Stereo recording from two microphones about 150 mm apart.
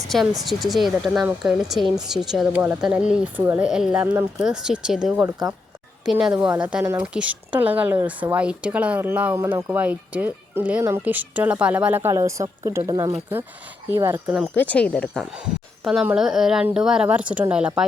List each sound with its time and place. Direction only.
0.4 s speech: centre (ahead or behind); by 4.4 s 15° right (ahead or behind)
4.4 s speech: 5° right (ahead or behind)
14.5 s speech: 10° left (ahead or behind); by 17.8 s 5° right (ahead or behind)